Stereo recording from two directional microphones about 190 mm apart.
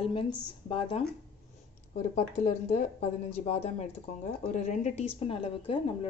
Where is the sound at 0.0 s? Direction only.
30° left (ahead or behind).